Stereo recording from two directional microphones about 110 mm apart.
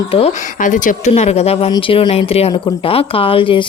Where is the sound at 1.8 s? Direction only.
55° left (ahead or behind).